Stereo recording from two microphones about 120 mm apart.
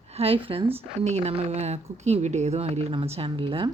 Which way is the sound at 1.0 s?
70° right (ahead or behind).